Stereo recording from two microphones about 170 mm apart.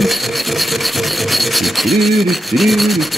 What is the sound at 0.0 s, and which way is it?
Rub, centre (ahead or behind).